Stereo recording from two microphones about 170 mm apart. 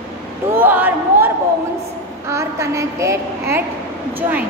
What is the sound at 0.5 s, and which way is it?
Speech, 10° right (ahead or behind).